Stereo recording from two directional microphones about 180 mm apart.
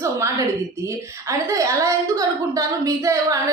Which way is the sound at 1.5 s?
20° right (ahead or behind).